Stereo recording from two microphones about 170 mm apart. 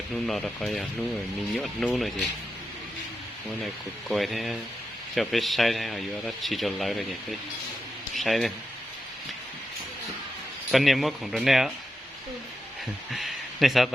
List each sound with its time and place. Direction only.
0.3 s a man's voice: centre (ahead or behind)
4.1 s a man's voice: centre (ahead or behind)
10.7 s a man's voice: centre (ahead or behind)
13.1 s speech: centre (ahead or behind)